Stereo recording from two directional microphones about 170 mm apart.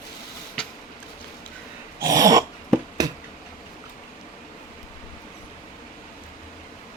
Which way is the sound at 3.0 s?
25° right (ahead or behind).